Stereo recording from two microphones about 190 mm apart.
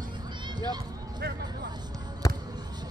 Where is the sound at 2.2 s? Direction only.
20° left (ahead or behind).